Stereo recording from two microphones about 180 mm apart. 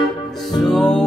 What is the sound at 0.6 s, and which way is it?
Music, 5° left (ahead or behind).